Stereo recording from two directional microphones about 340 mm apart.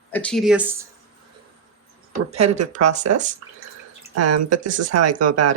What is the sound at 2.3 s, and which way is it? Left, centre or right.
Speech, centre.